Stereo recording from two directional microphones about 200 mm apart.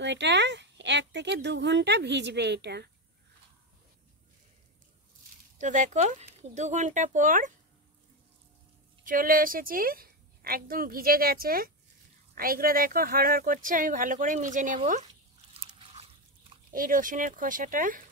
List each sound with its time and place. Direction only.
0.0 s speech: 60° right (ahead or behind)
5.6 s speech: 40° right (ahead or behind)
9.0 s a woman's voice: 45° right (ahead or behind)
15.5 s biting: 30° right (ahead or behind)
16.7 s a woman's voice: 40° right (ahead or behind)